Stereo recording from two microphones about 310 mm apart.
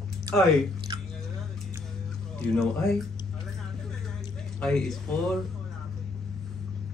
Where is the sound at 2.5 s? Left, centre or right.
Centre.